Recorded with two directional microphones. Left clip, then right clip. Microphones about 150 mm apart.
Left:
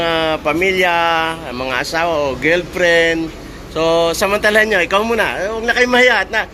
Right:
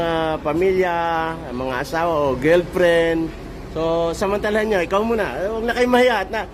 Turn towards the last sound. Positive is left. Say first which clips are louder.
# left 5 dB
turn(degrees=-15)  # may be behind; listen again after turning